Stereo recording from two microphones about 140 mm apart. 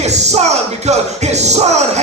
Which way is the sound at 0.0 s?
50° right (ahead or behind).